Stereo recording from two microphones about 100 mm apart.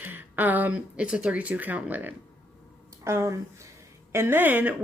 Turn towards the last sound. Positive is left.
turn(degrees=-20)  # may be behind; listen again after turning